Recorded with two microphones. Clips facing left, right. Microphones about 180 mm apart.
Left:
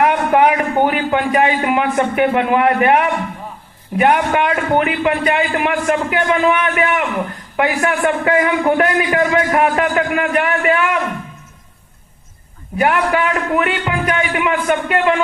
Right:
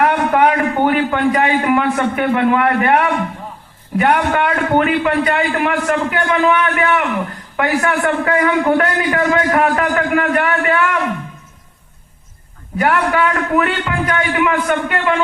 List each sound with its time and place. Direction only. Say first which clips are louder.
0.0 s a man's voice: even; 20° left (ahead or behind)
12.7 s a man's voice: even; 20° left (ahead or behind)